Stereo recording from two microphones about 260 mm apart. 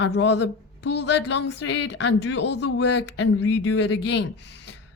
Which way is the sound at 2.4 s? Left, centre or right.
Left.